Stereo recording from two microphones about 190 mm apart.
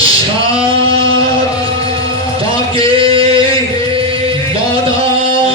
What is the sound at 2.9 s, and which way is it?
Singing, 30° right (ahead or behind).